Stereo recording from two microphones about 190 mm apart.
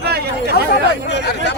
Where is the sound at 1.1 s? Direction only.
65° left (ahead or behind).